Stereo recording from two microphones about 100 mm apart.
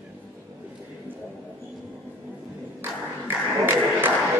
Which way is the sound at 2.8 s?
20° right (ahead or behind).